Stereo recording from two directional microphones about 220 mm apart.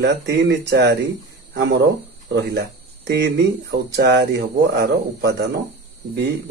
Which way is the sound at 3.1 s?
50° right (ahead or behind).